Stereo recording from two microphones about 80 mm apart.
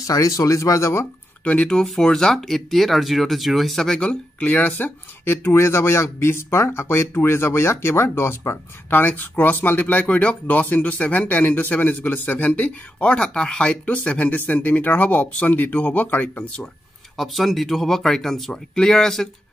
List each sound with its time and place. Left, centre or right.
0.0 s speech: left
1.4 s speech: centre
17.2 s speech: centre